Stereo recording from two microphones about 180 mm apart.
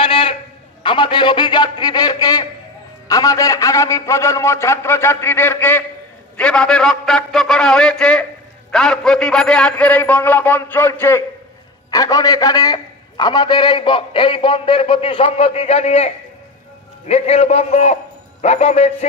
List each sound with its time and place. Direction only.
0.0 s a sound: 30° left (ahead or behind)
0.8 s a man's voice: 25° left (ahead or behind)
17.1 s a man's voice: 35° left (ahead or behind)